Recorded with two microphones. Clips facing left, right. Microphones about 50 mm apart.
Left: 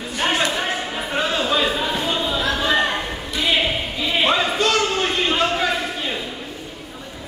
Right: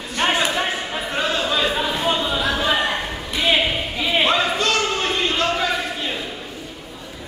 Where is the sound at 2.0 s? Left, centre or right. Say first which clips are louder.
Right 1 dB; centre.